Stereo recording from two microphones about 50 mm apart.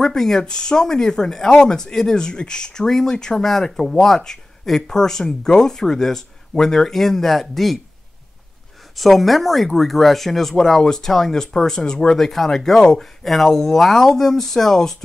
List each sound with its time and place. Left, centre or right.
0.0 s speech: centre
8.9 s speech: centre